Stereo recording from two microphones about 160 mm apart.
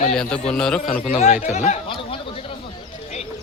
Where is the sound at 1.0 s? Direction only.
50° left (ahead or behind).